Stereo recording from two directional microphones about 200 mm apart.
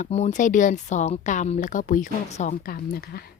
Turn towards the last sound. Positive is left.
turn(degrees=50)  # may be behind; listen again after turning